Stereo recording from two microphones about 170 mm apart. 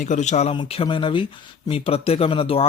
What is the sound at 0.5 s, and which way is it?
A man's voice, 30° left (ahead or behind).